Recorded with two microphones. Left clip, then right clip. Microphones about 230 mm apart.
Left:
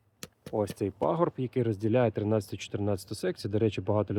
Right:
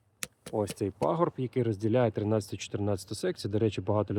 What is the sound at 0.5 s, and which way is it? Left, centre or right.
Speech, centre.